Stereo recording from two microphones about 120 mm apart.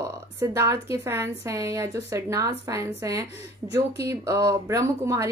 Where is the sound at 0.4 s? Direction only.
25° right (ahead or behind).